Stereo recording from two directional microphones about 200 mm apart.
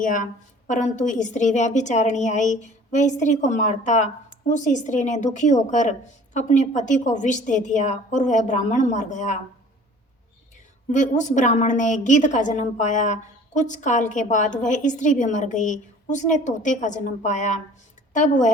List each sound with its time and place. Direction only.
0.0 s a woman's voice: 40° left (ahead or behind)
10.8 s a woman's voice: 40° left (ahead or behind)